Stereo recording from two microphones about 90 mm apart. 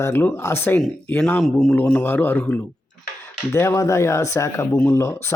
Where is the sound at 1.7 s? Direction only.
15° left (ahead or behind).